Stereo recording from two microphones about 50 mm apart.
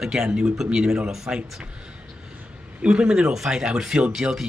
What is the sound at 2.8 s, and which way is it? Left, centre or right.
Speech, right.